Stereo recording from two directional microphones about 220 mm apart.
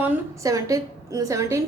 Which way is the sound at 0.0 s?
15° right (ahead or behind).